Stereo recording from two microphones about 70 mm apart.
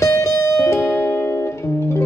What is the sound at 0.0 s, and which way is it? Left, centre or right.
Music, left.